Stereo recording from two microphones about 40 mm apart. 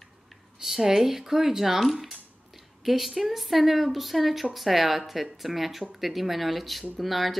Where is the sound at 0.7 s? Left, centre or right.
Centre.